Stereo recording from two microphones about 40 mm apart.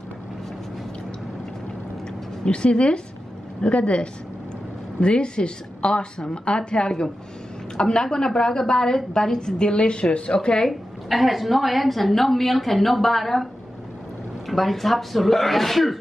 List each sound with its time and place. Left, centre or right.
2.4 s a woman's voice: left
10.7 s a woman's voice: centre
14.5 s a woman's voice: centre